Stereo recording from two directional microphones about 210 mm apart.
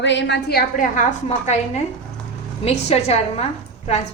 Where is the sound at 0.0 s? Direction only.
55° left (ahead or behind).